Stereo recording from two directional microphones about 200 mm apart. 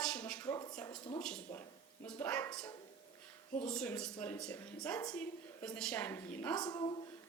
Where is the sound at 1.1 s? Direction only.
5° left (ahead or behind).